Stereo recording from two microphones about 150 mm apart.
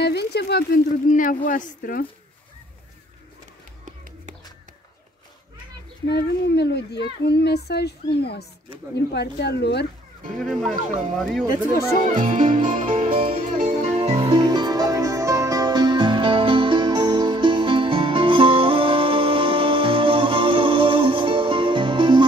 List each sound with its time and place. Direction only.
0.0 s speech: 90° left; by 2.0 s 65° left (ahead or behind)
6.1 s speech: 90° left
10.3 s speech: centre (ahead or behind)
11.4 s speech: 20° right (ahead or behind)
12.0 s speech: 60° right (ahead or behind)
13.1 s music: 40° right (ahead or behind)
13.6 s music: 50° right (ahead or behind); by 22.2 s 30° right (ahead or behind)